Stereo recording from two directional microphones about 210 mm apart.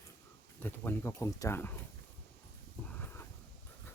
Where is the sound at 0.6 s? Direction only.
10° left (ahead or behind).